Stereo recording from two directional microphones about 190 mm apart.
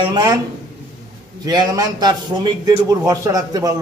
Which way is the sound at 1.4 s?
20° right (ahead or behind).